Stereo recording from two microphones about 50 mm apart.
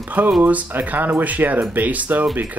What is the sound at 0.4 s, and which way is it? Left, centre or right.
Speech, right.